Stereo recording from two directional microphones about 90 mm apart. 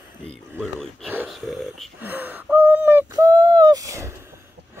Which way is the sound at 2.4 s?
15° right (ahead or behind).